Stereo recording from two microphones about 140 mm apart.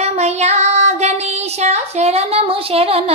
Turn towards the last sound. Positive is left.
turn(degrees=-45)  # may be behind; listen again after turning